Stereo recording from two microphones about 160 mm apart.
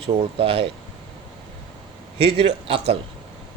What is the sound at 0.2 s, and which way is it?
Speech, 35° right (ahead or behind).